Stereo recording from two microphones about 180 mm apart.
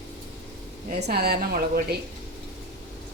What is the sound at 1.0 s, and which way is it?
Speech, 60° right (ahead or behind).